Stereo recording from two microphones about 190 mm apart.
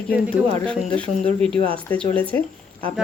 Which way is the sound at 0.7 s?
5° left (ahead or behind).